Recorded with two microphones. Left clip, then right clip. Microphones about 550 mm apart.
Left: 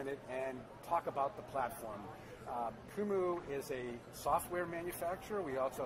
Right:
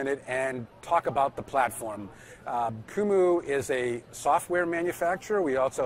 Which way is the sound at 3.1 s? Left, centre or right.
Right.